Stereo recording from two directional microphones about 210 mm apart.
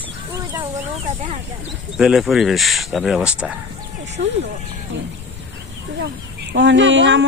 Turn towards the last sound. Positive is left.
turn(degrees=-60)  # may be behind; listen again after turning